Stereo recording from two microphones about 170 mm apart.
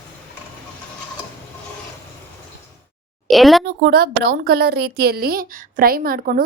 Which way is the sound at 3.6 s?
60° right (ahead or behind).